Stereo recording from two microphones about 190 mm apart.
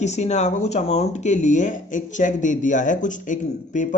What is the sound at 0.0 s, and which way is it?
Speech, 35° left (ahead or behind).